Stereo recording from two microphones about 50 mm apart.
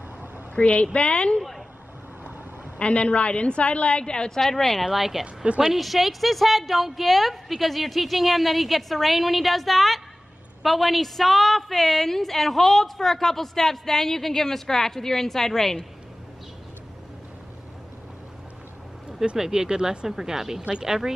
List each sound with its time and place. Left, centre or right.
0.6 s a woman's voice: left
2.8 s a woman's voice: left
4.8 s a woman's voice: centre
5.2 s a woman's voice: right
5.6 s a woman's voice: centre
19.3 s speech: centre